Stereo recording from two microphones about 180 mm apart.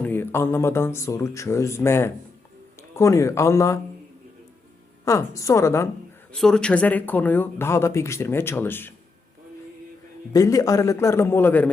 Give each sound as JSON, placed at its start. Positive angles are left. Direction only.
{"t": 0.0, "sound": "speech", "side_deg": 10}
{"t": 5.0, "sound": "speech", "side_deg": 15}
{"t": 6.3, "sound": "speech", "side_deg": 5}
{"t": 10.3, "sound": "speech", "side_deg": 20}